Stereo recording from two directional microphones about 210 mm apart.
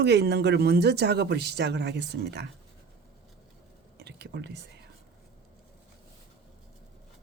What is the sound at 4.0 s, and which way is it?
Whispering, 50° right (ahead or behind).